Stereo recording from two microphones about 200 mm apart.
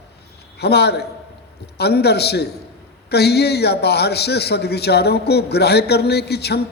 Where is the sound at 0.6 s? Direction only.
55° left (ahead or behind).